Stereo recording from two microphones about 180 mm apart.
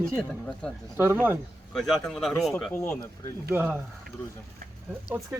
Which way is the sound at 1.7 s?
Centre (ahead or behind).